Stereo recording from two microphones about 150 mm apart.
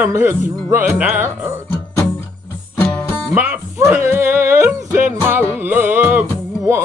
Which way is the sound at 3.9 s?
15° right (ahead or behind).